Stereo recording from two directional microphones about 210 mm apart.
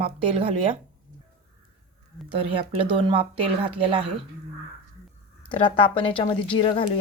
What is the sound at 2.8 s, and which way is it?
Speech, 25° right (ahead or behind).